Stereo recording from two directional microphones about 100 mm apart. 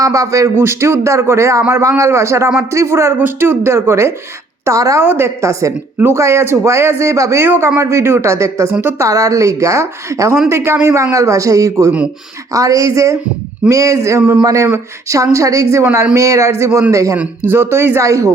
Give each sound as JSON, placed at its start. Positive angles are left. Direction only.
{"t": 0.0, "sound": "a man's voice", "side_deg": -35}
{"t": 5.0, "sound": "speech", "side_deg": -25}
{"t": 9.0, "sound": "a man's voice", "side_deg": -35}
{"t": 17.2, "sound": "speech", "side_deg": -20}